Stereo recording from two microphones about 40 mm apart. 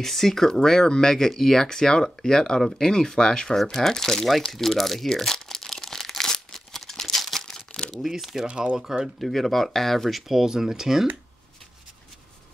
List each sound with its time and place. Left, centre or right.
0.0 s speech: centre
5.2 s crumpling: centre
8.0 s speech: centre
9.2 s speech: centre